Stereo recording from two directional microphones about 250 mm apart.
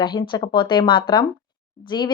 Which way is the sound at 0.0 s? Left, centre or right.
Centre.